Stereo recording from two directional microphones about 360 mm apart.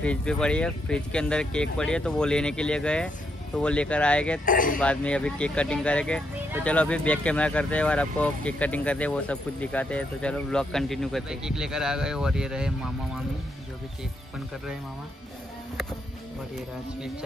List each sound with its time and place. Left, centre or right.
0.0 s speech: centre
4.5 s speech: left
4.7 s speech: centre